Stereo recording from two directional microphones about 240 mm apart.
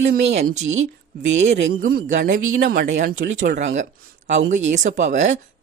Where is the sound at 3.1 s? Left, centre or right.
Right.